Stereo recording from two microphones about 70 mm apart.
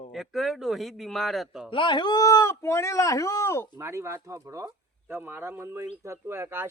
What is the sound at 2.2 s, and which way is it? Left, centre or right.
Speech, left.